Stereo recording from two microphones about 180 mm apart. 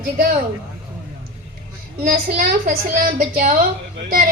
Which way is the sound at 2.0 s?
50° right (ahead or behind).